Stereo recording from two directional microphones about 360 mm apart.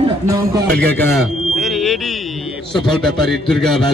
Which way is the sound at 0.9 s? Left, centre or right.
Centre.